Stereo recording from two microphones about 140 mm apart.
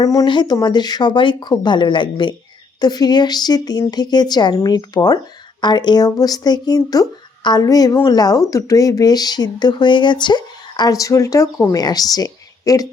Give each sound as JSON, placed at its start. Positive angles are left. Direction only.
{"t": 0.0, "sound": "speech", "side_deg": 25}